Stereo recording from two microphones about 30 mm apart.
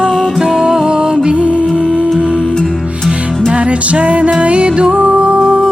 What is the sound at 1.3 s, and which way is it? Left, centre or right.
Music, right.